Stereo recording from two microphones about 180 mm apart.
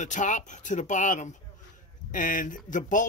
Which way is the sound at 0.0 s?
45° left (ahead or behind).